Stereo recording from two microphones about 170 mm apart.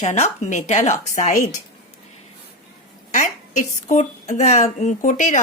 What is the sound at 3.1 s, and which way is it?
A woman's voice, 45° left (ahead or behind).